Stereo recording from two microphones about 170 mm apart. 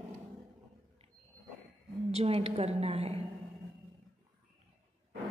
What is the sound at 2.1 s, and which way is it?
A woman's voice, 35° right (ahead or behind).